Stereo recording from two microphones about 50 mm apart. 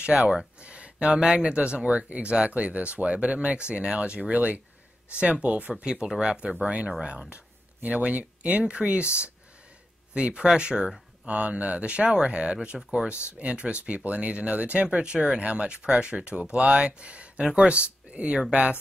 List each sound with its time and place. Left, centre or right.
0.0 s speech: right
10.1 s speech: centre